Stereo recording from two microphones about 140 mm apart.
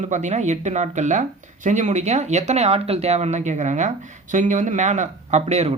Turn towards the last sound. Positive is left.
turn(degrees=-50)  # may be behind; listen again after turning